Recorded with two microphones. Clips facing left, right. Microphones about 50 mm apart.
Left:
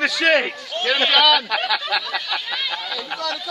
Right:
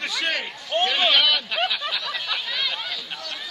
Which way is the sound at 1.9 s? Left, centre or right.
Left.